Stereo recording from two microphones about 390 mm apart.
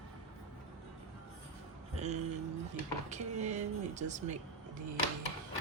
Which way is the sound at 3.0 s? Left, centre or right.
Centre.